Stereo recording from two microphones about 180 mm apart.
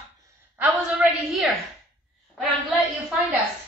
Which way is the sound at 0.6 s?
5° right (ahead or behind).